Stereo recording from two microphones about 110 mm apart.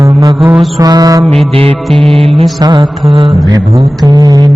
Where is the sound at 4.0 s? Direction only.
35° right (ahead or behind).